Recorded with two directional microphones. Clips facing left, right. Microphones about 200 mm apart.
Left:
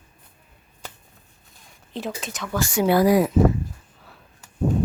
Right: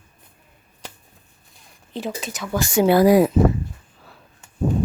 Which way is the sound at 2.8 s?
25° right (ahead or behind).